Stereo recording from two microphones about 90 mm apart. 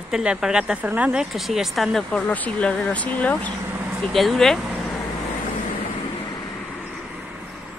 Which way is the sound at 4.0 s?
Centre (ahead or behind).